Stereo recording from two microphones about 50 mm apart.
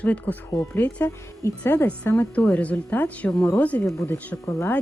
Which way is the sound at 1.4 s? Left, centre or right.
Left.